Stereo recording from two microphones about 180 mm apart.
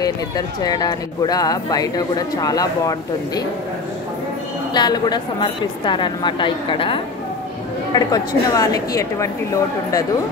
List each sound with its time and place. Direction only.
0.0 s speech: 20° left (ahead or behind)
4.7 s speech: 25° left (ahead or behind)